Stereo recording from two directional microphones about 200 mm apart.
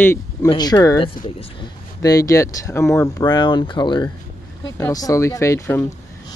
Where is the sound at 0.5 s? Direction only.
20° left (ahead or behind).